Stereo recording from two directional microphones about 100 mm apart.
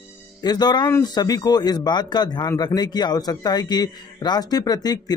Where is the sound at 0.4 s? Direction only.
45° left (ahead or behind).